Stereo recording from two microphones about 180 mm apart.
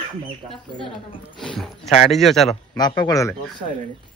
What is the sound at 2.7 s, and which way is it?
Speech, 25° left (ahead or behind).